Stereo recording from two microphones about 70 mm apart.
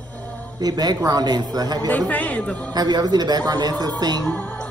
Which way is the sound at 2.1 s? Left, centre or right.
Centre.